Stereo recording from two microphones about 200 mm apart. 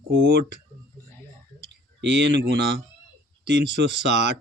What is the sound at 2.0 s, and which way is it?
Speech, 60° right (ahead or behind).